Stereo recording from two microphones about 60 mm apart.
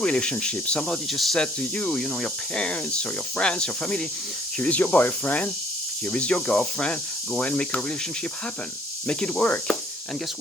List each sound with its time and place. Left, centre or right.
0.0 s speech: centre
1.1 s speech: centre
1.4 s speech: centre
4.6 s speech: left
9.0 s speech: centre